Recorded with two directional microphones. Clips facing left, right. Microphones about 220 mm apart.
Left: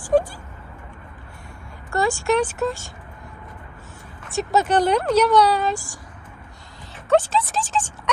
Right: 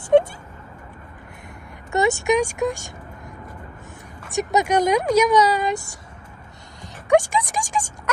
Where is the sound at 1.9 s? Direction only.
20° right (ahead or behind).